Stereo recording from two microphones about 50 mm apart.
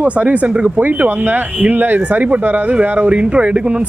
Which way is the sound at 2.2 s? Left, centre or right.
Right.